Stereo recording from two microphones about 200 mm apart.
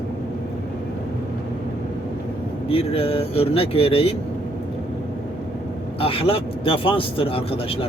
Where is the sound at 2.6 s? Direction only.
30° left (ahead or behind).